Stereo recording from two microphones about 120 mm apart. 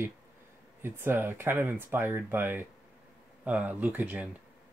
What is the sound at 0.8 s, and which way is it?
Speech, 20° right (ahead or behind).